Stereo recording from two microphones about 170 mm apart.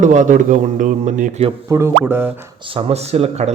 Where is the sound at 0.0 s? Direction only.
45° right (ahead or behind).